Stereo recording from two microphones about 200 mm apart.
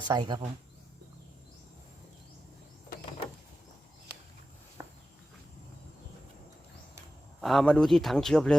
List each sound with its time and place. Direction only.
0.1 s speech: 20° right (ahead or behind)
4.8 s walk: 15° right (ahead or behind)
7.4 s speech: 5° left (ahead or behind)